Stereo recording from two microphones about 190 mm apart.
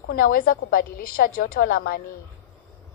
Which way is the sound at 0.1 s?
50° left (ahead or behind).